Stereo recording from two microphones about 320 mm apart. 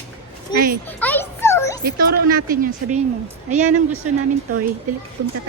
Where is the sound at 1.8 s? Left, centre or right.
Right.